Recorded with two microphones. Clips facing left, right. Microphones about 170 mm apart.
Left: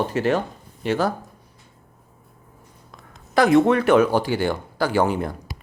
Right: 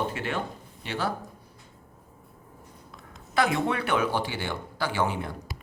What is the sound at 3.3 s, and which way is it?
Speech, 40° left (ahead or behind).